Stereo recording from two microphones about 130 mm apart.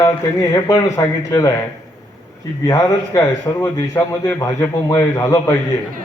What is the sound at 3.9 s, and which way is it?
Speech, 15° left (ahead or behind).